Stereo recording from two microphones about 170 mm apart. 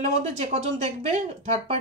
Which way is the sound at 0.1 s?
40° right (ahead or behind).